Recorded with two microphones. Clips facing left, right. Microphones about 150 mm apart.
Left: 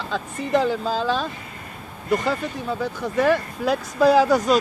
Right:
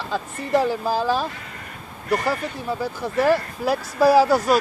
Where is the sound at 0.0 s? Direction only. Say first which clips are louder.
Even; 10° right (ahead or behind).